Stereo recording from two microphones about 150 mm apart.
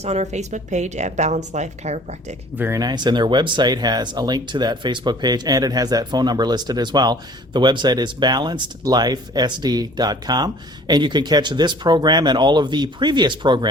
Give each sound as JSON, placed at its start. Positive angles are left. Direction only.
{"t": 0.0, "sound": "a woman's voice", "side_deg": -45}
{"t": 2.6, "sound": "speech", "side_deg": -20}